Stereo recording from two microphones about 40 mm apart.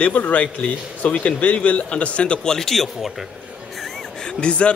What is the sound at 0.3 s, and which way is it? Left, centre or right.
A man's voice, left.